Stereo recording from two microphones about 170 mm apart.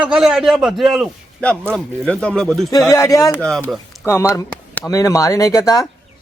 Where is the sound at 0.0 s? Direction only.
5° right (ahead or behind).